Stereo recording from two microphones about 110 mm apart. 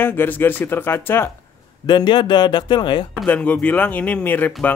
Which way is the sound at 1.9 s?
45° left (ahead or behind).